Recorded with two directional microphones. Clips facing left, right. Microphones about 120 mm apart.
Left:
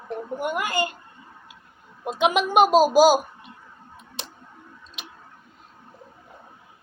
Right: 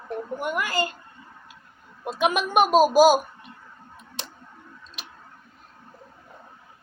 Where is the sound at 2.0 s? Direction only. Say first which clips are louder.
Left 2 dB; 25° left (ahead or behind).